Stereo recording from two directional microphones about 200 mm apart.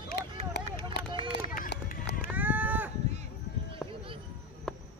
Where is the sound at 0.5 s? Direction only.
55° left (ahead or behind).